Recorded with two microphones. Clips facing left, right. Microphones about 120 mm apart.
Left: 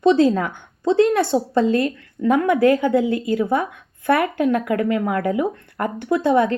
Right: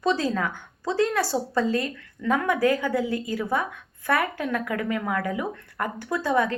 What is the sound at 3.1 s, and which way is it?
Speech, 60° left (ahead or behind).